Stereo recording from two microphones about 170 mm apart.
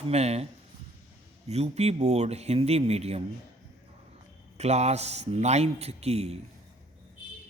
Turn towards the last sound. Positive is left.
turn(degrees=-35)  # may be behind; listen again after turning